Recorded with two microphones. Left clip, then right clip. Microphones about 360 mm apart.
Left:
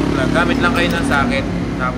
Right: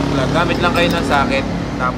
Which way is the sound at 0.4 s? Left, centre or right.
Right.